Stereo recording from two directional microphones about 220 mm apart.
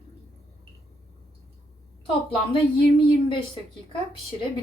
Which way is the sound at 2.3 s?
25° left (ahead or behind).